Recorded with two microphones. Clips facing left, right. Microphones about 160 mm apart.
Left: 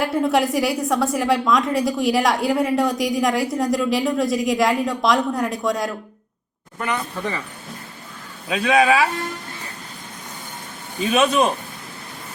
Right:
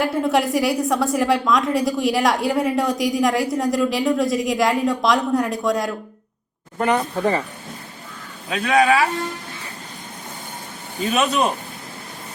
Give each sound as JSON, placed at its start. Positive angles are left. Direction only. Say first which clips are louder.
{"t": 0.0, "sound": "a woman's voice", "louder": "even", "side_deg": 0}
{"t": 6.7, "sound": "speech", "louder": "right 6 dB", "side_deg": -40}
{"t": 8.4, "sound": "speech", "louder": "even", "side_deg": 10}
{"t": 11.1, "sound": "speech", "louder": "left 3 dB", "side_deg": 10}